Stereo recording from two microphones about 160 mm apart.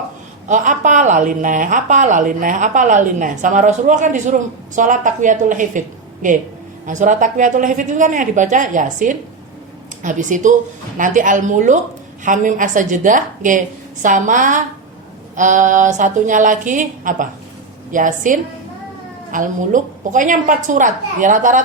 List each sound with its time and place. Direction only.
0.4 s a woman's voice: 55° right (ahead or behind)